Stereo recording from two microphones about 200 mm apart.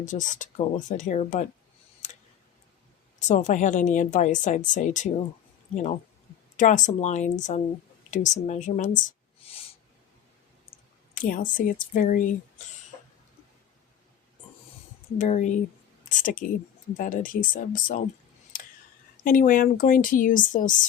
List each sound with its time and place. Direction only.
0.0 s speech: 40° left (ahead or behind)
2.0 s clicking: 35° left (ahead or behind)
3.2 s speech: 35° left (ahead or behind)
11.1 s speech: 40° left (ahead or behind)
15.2 s speech: 40° left (ahead or behind)
19.2 s speech: 45° left (ahead or behind)